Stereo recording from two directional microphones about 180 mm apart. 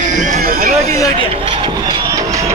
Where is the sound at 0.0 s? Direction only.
45° right (ahead or behind).